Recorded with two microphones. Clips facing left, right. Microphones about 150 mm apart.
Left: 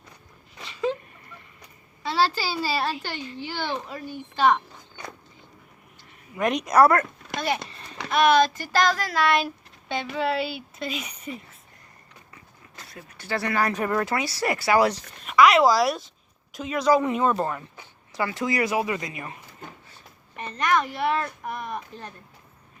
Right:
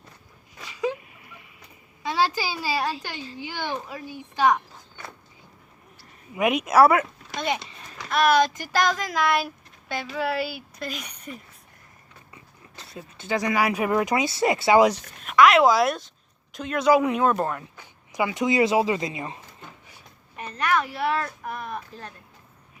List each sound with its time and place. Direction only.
0.6 s a sound: 10° right (ahead or behind)
2.0 s speech: 15° right (ahead or behind)
6.3 s speech: 5° right (ahead or behind)
7.3 s speech: 20° right (ahead or behind)
8.1 s speech: centre (ahead or behind)
8.4 s speech: 15° right (ahead or behind); by 11.3 s 5° left (ahead or behind)
12.3 s speech: 25° right (ahead or behind)
15.2 s speech: centre (ahead or behind)
18.1 s speech: 15° right (ahead or behind)
19.9 s a sound: 10° right (ahead or behind)
21.5 s speech: centre (ahead or behind)